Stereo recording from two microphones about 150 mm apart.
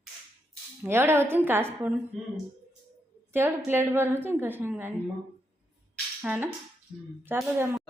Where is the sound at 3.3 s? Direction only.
15° right (ahead or behind).